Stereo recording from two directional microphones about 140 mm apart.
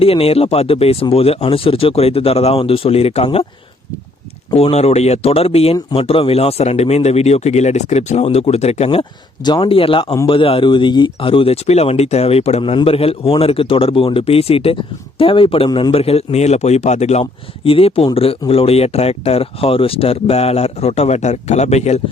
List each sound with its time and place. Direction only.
0.0 s a man's voice: 45° left (ahead or behind)
4.5 s a man's voice: 50° left (ahead or behind)